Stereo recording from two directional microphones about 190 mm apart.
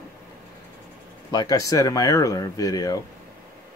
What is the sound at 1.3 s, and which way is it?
Speech, 20° left (ahead or behind).